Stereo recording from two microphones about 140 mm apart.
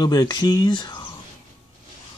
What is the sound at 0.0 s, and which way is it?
Speech, 30° left (ahead or behind).